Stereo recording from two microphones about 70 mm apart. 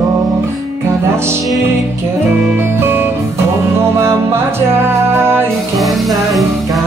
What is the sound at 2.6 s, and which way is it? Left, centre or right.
Music, right.